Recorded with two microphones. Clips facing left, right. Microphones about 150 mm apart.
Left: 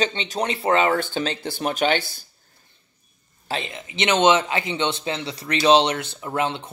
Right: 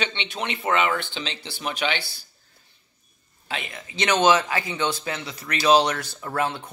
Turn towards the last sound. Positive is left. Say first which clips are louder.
# left 2 dB
turn(degrees=20)  # may be behind; listen again after turning